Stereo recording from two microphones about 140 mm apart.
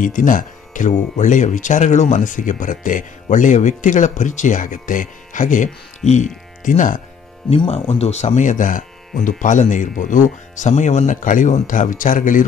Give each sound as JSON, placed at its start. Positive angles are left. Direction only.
{"t": 0.0, "sound": "speech", "side_deg": 70}
{"t": 7.4, "sound": "speech", "side_deg": 40}